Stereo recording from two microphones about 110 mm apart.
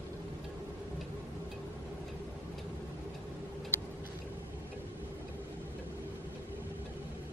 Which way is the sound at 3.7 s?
20° left (ahead or behind).